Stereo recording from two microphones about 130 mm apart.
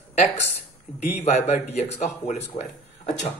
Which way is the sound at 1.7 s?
60° left (ahead or behind).